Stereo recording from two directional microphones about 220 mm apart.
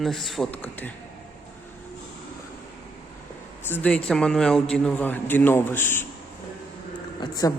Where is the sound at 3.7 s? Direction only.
5° left (ahead or behind).